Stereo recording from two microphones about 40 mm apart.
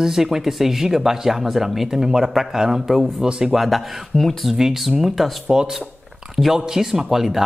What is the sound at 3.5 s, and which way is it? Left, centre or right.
Speech, centre.